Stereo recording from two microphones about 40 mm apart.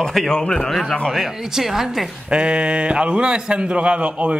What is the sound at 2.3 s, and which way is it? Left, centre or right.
A man's voice, right.